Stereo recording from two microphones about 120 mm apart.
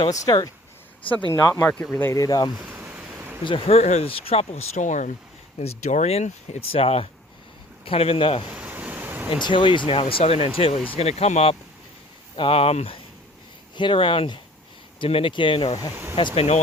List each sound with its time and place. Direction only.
0.1 s speech: 30° left (ahead or behind)
1.6 s speech: 10° left (ahead or behind)
2.1 s speech: 30° left (ahead or behind)
2.6 s a sound: 15° right (ahead or behind)
3.4 s speech: 45° left (ahead or behind)
3.8 s speech: 65° left (ahead or behind); by 5.1 s 90° left
5.5 s speech: 70° left (ahead or behind); by 8.4 s 50° left (ahead or behind)
8.4 s waves: 10° right (ahead or behind)
9.4 s speech: 45° left (ahead or behind)
13.7 s speech: 45° left (ahead or behind)